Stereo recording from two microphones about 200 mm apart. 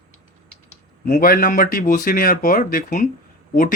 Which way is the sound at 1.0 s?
45° left (ahead or behind).